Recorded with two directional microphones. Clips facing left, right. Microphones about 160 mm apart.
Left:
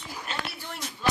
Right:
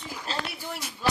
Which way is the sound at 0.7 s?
5° right (ahead or behind).